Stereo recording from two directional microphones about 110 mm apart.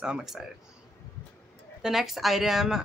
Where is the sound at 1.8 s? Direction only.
5° right (ahead or behind).